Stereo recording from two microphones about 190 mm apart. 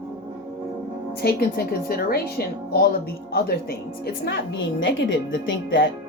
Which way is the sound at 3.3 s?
55° left (ahead or behind).